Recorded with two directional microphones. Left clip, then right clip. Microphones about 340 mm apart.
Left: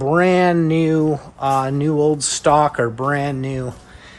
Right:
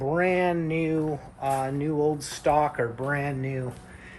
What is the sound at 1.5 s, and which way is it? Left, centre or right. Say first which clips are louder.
Speech: left 9 dB; left.